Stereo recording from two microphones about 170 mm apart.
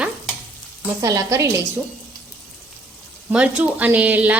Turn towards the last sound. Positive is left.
turn(degrees=-10)  # may be behind; listen again after turning